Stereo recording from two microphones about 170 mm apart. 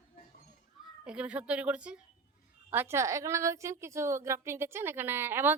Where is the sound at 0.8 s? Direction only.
5° right (ahead or behind).